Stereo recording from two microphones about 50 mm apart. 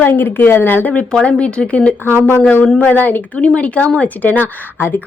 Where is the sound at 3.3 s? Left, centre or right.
Left.